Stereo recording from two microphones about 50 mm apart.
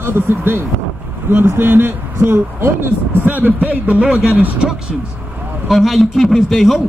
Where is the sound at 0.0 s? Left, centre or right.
Right.